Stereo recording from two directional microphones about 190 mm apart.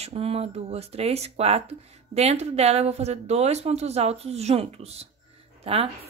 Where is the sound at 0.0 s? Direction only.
30° right (ahead or behind).